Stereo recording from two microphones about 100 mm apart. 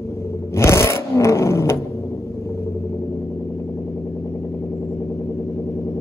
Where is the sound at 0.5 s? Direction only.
30° left (ahead or behind).